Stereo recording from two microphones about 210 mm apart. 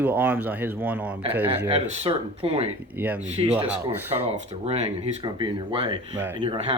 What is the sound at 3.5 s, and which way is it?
Speech, 5° right (ahead or behind).